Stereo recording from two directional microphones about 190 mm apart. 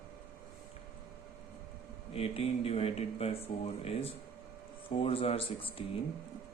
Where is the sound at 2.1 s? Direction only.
30° left (ahead or behind).